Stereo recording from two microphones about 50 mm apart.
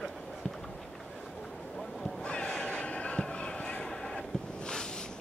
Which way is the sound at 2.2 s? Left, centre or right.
Centre.